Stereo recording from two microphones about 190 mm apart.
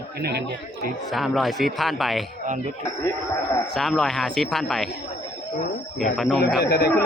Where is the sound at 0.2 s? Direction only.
60° right (ahead or behind).